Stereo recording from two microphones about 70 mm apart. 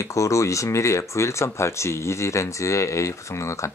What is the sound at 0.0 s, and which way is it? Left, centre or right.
Speech, left.